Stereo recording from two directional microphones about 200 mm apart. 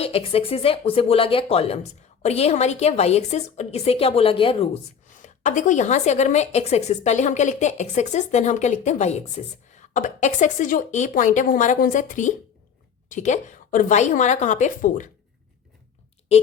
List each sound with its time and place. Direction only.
0.0 s a woman's voice: 30° left (ahead or behind)